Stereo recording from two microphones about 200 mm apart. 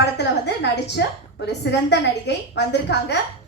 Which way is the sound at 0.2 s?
55° left (ahead or behind).